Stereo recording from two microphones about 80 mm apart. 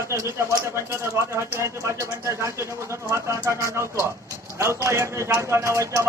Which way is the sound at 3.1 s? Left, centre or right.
Right.